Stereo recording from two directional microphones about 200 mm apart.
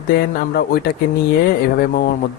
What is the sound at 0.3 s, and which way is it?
Speech, 50° left (ahead or behind).